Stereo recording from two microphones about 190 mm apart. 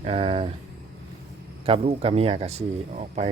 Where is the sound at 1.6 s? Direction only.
30° right (ahead or behind).